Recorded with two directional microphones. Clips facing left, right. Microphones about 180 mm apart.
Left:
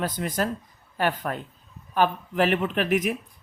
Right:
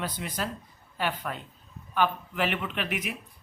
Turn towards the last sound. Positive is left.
turn(degrees=45)  # may be behind; listen again after turning